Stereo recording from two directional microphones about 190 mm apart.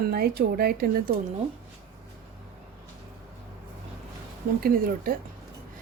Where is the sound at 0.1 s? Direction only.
55° right (ahead or behind).